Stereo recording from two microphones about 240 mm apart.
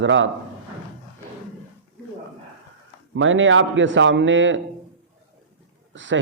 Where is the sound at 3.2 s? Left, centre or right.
Right.